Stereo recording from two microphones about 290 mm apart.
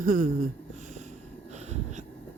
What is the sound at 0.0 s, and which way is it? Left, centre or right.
Speech, right.